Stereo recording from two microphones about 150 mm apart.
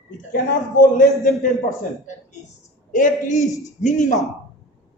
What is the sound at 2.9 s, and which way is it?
A man's voice, 60° left (ahead or behind).